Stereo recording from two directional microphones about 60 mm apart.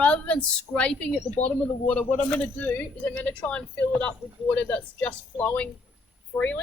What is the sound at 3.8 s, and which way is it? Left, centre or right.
A woman's voice, left.